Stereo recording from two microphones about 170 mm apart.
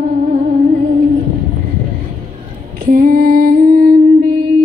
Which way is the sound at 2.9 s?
60° right (ahead or behind).